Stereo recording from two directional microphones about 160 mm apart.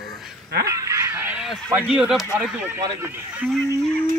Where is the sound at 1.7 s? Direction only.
5° right (ahead or behind).